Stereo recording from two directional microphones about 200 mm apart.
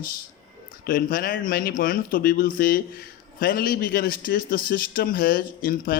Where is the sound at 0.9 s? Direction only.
45° left (ahead or behind).